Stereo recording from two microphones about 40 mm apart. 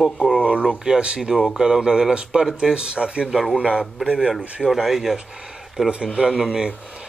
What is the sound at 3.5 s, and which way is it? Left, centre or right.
Speech, right.